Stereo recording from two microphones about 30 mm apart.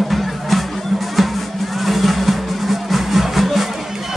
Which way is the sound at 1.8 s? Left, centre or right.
Centre.